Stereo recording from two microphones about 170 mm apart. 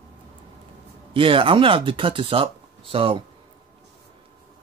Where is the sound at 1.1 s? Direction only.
30° right (ahead or behind).